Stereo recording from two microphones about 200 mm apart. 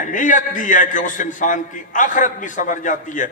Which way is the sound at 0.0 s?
40° left (ahead or behind).